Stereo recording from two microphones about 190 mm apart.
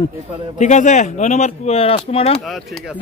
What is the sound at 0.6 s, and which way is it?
Speech, 40° left (ahead or behind).